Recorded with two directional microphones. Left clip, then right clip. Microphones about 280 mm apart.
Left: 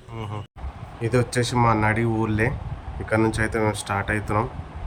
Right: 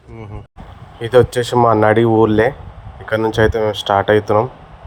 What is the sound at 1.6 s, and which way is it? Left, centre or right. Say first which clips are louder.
Speech: right 11 dB; right.